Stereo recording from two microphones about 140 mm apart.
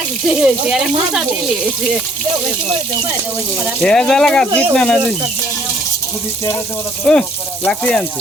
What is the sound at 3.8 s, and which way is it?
Speech, 5° left (ahead or behind).